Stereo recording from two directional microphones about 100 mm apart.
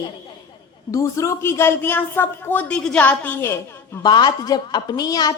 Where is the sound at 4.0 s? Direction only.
45° left (ahead or behind).